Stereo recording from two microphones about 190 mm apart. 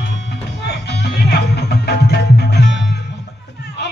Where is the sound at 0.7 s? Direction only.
60° left (ahead or behind).